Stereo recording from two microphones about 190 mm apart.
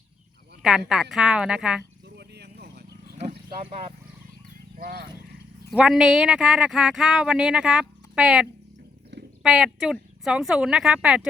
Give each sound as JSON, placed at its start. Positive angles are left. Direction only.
{"t": 0.6, "sound": "a woman's voice", "side_deg": 0}
{"t": 2.0, "sound": "vehicle", "side_deg": -60}
{"t": 3.6, "sound": "speech", "side_deg": -35}
{"t": 4.8, "sound": "speech", "side_deg": -55}
{"t": 5.7, "sound": "speech", "side_deg": -5}